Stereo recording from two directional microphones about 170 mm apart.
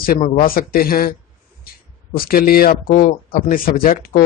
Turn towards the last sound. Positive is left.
turn(degrees=55)  # may be behind; listen again after turning